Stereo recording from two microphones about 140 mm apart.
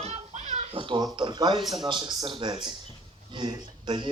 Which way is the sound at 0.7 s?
35° right (ahead or behind).